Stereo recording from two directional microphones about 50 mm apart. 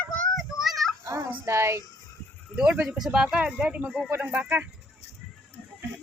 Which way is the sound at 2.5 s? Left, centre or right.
Centre.